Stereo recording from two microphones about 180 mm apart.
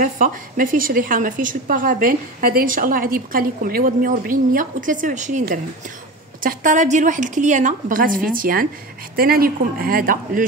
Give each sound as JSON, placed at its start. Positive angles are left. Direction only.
{"t": 0.0, "sound": "a woman's voice", "side_deg": -50}